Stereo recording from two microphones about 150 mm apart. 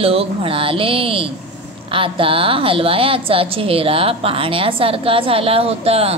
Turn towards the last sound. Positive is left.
turn(degrees=-40)  # may be behind; listen again after turning